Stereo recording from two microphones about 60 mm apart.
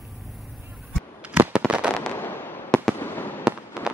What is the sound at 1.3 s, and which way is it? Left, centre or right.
Fireworks, right.